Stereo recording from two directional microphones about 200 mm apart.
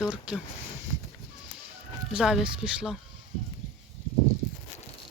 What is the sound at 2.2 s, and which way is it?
Speech, 5° right (ahead or behind).